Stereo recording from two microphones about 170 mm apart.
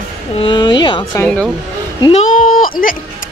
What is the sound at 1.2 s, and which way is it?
Speech, 5° left (ahead or behind).